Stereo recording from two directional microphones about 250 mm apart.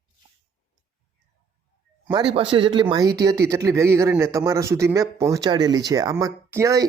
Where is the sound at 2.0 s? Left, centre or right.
Centre.